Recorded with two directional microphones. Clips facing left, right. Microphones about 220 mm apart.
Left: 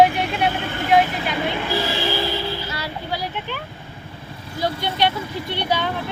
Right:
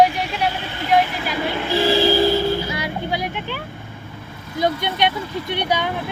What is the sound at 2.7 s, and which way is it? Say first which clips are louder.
Speech: right 4 dB; 20° right (ahead or behind).